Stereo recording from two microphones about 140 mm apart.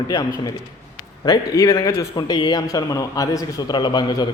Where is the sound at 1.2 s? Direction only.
25° left (ahead or behind).